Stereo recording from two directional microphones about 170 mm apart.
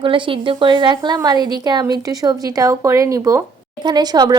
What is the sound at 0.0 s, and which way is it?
Speech, 30° right (ahead or behind).